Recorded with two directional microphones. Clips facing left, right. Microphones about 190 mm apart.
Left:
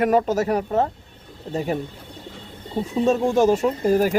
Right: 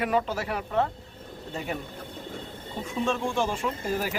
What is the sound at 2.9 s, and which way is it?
Speech, 40° left (ahead or behind).